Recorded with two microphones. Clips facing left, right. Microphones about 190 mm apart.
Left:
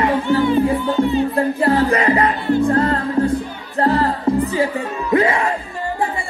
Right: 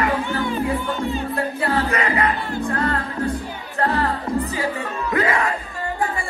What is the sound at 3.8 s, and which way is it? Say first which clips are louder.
Music: left 5 dB; 35° left (ahead or behind).